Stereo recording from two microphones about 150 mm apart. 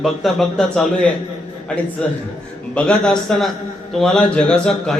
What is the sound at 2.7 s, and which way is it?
A man's voice, 5° left (ahead or behind).